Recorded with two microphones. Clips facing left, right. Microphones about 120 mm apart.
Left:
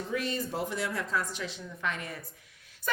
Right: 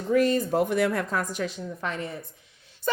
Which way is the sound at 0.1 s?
50° right (ahead or behind).